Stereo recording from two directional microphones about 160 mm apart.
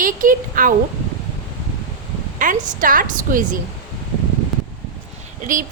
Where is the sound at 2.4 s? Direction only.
55° right (ahead or behind).